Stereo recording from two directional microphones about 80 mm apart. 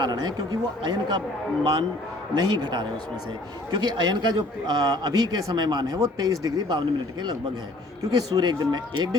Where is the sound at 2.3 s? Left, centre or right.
Right.